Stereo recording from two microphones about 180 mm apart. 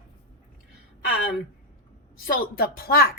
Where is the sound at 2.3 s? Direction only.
55° left (ahead or behind).